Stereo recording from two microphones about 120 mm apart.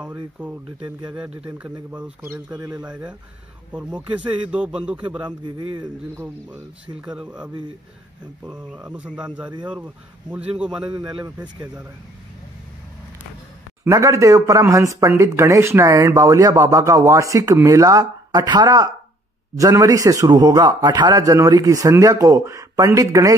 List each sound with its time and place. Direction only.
0.0 s a man's voice: 15° right (ahead or behind)
2.5 s a man's voice: 30° right (ahead or behind)
2.9 s a man's voice: 10° right (ahead or behind)
5.2 s speech: 45° right (ahead or behind)
6.1 s a man's voice: 10° right (ahead or behind)
9.5 s speech: 40° right (ahead or behind)
9.8 s a man's voice: 15° right (ahead or behind)
10.9 s speech: 40° right (ahead or behind)
11.4 s a man's voice: 10° right (ahead or behind)
13.8 s a man's voice: 25° right (ahead or behind)